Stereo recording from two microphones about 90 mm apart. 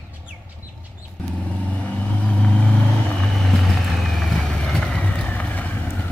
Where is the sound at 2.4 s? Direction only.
15° left (ahead or behind).